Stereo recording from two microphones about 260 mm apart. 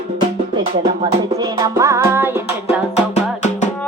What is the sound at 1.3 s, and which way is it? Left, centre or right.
Music, centre.